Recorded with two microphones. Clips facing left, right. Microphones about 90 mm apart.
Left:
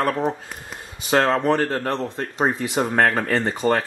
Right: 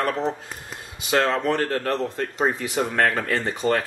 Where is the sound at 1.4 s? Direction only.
30° left (ahead or behind).